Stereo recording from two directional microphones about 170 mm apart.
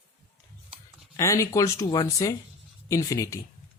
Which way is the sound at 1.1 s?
20° left (ahead or behind).